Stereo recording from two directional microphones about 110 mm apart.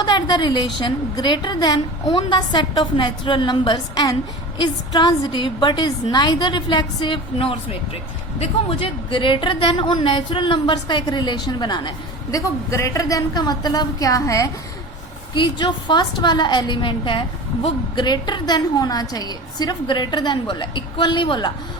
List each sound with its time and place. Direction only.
0.0 s a woman's voice: 45° left (ahead or behind)
12.3 s a woman's voice: 30° left (ahead or behind)
15.4 s a woman's voice: 45° left (ahead or behind)